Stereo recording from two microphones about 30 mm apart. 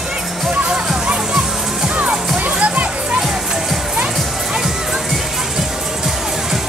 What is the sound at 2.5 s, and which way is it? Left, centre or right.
Music, right.